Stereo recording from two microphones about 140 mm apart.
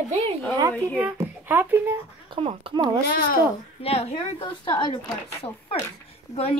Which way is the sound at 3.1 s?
90° left.